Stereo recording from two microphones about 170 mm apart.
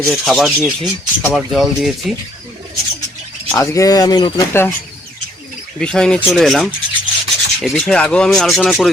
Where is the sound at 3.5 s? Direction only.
20° left (ahead or behind).